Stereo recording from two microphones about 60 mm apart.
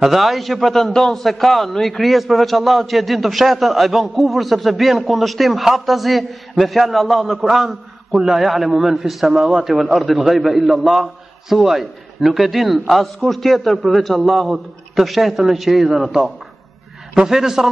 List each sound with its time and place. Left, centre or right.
0.0 s a man's voice: centre